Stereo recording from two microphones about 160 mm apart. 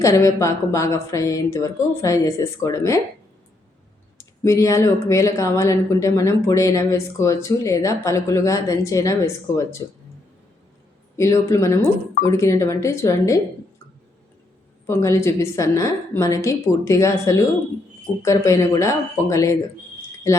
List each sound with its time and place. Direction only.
0.0 s speech: 20° left (ahead or behind)
4.2 s speech: 20° left (ahead or behind)
11.2 s speech: 20° left (ahead or behind)
14.8 s speech: 20° left (ahead or behind)